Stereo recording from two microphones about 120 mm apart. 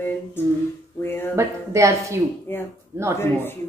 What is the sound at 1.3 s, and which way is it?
Speech, 25° right (ahead or behind).